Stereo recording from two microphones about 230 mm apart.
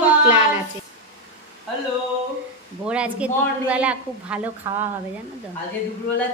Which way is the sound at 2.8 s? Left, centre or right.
Centre.